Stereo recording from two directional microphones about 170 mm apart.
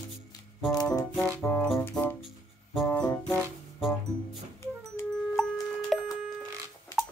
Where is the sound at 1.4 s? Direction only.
10° left (ahead or behind).